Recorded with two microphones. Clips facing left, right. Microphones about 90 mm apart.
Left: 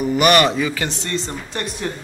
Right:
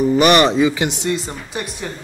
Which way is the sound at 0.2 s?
25° right (ahead or behind).